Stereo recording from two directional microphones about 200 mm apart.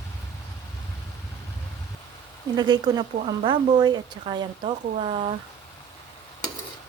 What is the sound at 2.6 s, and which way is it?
Speech, 20° right (ahead or behind).